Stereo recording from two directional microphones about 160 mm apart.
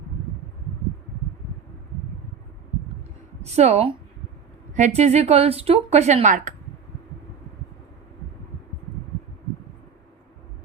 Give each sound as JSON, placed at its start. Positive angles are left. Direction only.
{"t": 3.4, "sound": "speech", "side_deg": -40}